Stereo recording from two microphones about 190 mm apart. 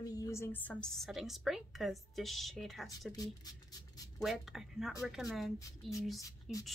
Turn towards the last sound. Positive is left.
turn(degrees=0)  # may be behind; listen again after turning